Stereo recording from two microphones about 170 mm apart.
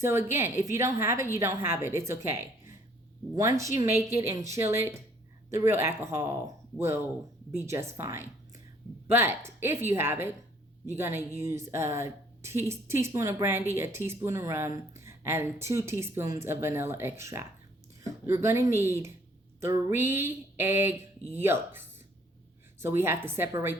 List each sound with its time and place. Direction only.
0.0 s speech: 15° right (ahead or behind)